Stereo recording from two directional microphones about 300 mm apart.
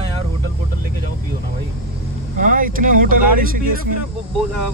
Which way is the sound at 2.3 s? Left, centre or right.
Right.